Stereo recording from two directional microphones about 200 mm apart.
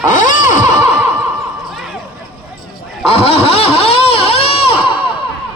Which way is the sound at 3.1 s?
30° left (ahead or behind).